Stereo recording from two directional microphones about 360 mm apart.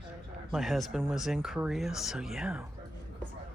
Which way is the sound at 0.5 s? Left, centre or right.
Centre.